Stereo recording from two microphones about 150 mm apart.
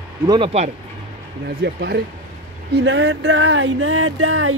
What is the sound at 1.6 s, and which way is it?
Speech, 90° right.